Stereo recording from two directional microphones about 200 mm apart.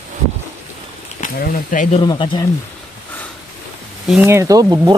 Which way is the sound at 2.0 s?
25° left (ahead or behind).